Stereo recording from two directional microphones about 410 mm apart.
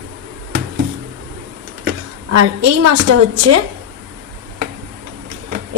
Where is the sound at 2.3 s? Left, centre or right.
Right.